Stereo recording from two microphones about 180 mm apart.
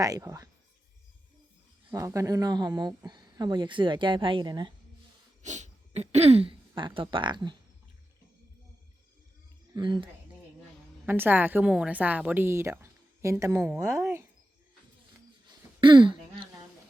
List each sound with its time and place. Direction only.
0.0 s speech: 20° right (ahead or behind)
1.9 s speech: 20° right (ahead or behind)
5.4 s speech: 40° right (ahead or behind); by 7.5 s 25° right (ahead or behind)
9.7 s speech: 25° right (ahead or behind)
11.0 s a woman's voice: 10° right (ahead or behind)
15.4 s throat clearing: 25° right (ahead or behind)